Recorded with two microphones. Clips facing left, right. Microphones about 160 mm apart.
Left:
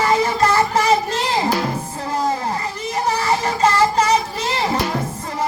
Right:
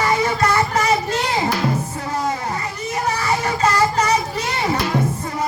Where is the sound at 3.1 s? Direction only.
30° left (ahead or behind).